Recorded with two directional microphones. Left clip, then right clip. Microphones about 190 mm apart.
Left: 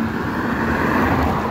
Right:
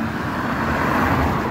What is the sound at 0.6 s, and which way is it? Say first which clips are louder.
Vehicle: left 1 dB; 70° right (ahead or behind).